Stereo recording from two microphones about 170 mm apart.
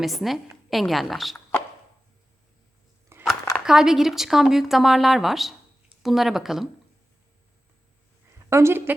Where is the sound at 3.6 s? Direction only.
5° right (ahead or behind).